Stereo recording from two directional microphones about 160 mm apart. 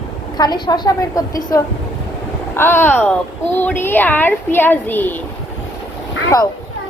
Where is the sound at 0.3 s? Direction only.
25° left (ahead or behind).